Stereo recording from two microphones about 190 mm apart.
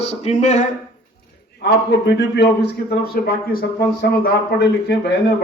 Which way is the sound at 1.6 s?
60° left (ahead or behind).